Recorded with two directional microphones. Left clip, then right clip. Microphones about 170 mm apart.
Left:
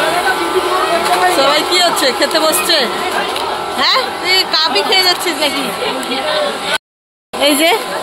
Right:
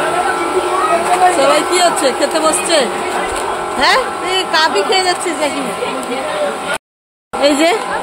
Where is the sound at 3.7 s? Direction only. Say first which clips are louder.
Right 1 dB; 35° right (ahead or behind).